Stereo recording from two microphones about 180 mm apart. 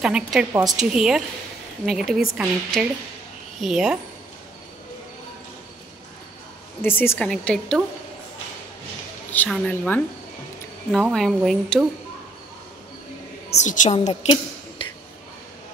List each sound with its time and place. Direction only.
0.0 s speech: 5° right (ahead or behind)
6.8 s a woman's voice: 10° left (ahead or behind)
9.3 s a woman's voice: 10° left (ahead or behind)
13.6 s a woman's voice: 35° left (ahead or behind)